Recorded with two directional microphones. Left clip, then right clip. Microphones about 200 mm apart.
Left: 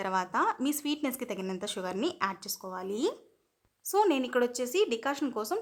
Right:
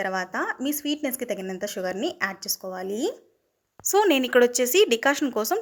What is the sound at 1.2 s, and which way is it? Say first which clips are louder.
Speech: right 6 dB; 10° right (ahead or behind).